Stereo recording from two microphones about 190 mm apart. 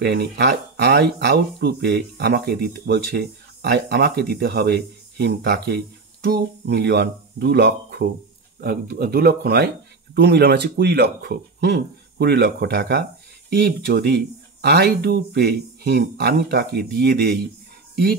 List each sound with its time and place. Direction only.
0.0 s speech: 60° right (ahead or behind)